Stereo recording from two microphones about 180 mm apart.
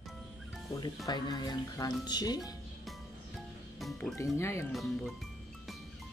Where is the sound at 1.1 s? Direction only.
25° left (ahead or behind).